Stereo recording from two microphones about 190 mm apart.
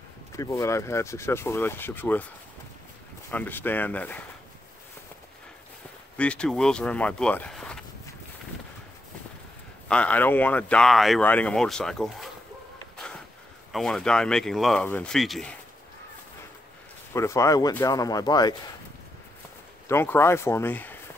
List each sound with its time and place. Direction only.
0.3 s speech: 15° left (ahead or behind)
3.3 s speech: 10° left (ahead or behind)
6.1 s speech: 5° left (ahead or behind)
9.8 s speech: 5° left (ahead or behind)
12.9 s a sound: 5° left (ahead or behind)
13.7 s speech: centre (ahead or behind)
17.1 s speech: 15° left (ahead or behind)
19.9 s speech: 15° left (ahead or behind)